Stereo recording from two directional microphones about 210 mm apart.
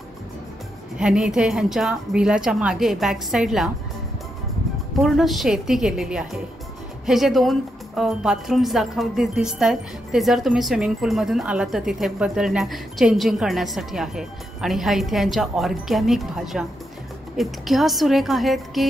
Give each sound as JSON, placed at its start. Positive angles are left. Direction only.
{"t": 0.9, "sound": "speech", "side_deg": -5}
{"t": 5.0, "sound": "speech", "side_deg": 0}